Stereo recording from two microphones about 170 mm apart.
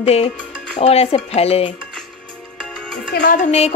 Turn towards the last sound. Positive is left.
turn(degrees=40)  # may be behind; listen again after turning